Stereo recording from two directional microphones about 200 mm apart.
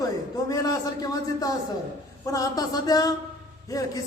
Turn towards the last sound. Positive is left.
turn(degrees=20)  # may be behind; listen again after turning